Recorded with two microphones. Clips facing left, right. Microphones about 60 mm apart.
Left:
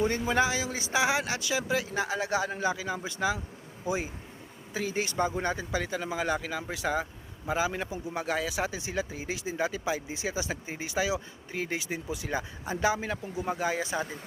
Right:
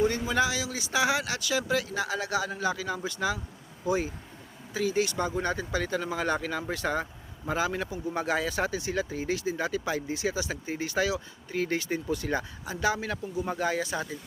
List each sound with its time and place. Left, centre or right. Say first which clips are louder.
0.0 s speech: even; left; by 7.9 s centre
8.1 s speech: right 2 dB; centre
12.6 s speech: left 2 dB; left